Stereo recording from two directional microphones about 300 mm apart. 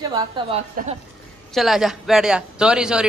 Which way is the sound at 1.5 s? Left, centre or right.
Centre.